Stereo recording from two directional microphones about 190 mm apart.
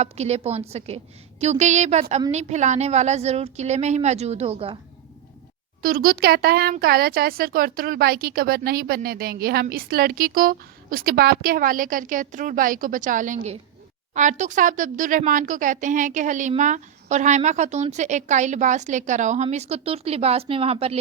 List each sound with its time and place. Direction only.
0.0 s speech: 35° right (ahead or behind)
5.8 s speech: 50° right (ahead or behind); by 21.0 s 30° right (ahead or behind)